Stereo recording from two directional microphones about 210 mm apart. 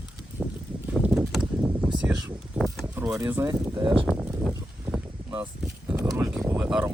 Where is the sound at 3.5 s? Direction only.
20° right (ahead or behind).